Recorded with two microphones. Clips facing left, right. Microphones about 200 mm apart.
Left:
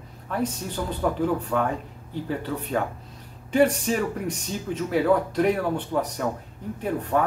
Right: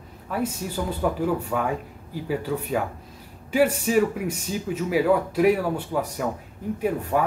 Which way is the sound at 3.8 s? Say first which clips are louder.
Right 4 dB; 5° right (ahead or behind).